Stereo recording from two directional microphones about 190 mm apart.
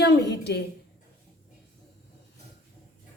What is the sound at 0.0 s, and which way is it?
Speech, 60° left (ahead or behind).